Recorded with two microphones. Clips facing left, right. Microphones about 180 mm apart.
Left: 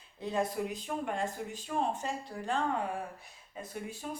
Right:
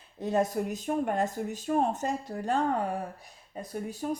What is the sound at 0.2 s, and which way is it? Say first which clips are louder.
Speech: right 5 dB; 45° right (ahead or behind).